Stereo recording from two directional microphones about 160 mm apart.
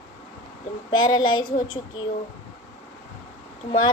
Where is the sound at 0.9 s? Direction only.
30° left (ahead or behind).